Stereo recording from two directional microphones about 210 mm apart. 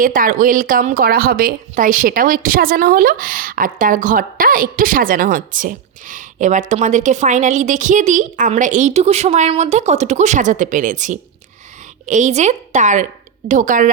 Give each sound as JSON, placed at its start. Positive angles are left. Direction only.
{"t": 0.0, "sound": "a woman's voice", "side_deg": -40}